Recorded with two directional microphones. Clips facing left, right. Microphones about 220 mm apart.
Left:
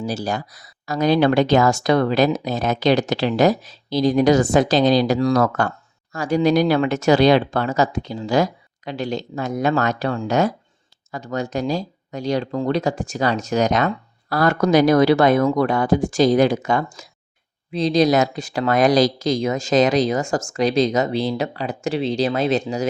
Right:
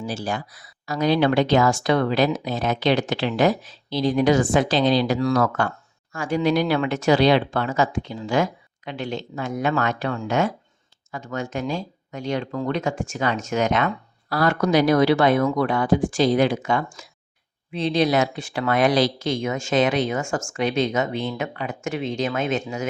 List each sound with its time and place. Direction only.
0.0 s speech: 40° left (ahead or behind)